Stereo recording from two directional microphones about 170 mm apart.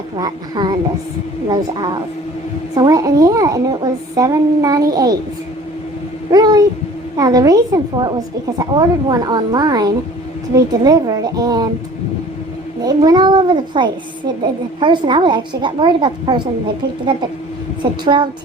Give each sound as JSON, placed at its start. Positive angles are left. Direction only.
{"t": 0.2, "sound": "speech", "side_deg": -25}
{"t": 6.3, "sound": "speech", "side_deg": -25}
{"t": 12.8, "sound": "speech", "side_deg": -25}